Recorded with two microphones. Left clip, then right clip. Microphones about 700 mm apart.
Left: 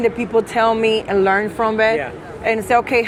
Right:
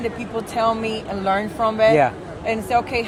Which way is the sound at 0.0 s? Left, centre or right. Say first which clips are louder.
Left 9 dB; left.